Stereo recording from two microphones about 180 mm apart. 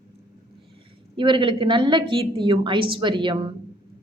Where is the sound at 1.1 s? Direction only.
25° right (ahead or behind).